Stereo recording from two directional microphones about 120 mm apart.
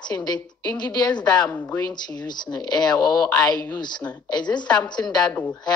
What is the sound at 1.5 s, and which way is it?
Speech, 15° left (ahead or behind).